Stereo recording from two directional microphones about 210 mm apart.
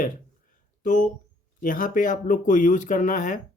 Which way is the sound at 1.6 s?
40° left (ahead or behind).